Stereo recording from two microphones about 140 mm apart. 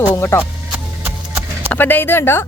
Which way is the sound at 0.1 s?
15° left (ahead or behind).